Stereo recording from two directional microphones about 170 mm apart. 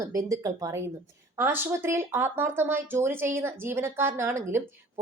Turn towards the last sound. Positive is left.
turn(degrees=-15)  # may be behind; listen again after turning